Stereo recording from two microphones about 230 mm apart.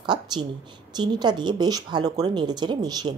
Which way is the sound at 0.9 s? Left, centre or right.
Centre.